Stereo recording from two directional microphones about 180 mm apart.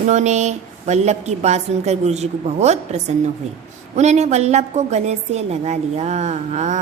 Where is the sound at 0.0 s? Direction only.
40° right (ahead or behind).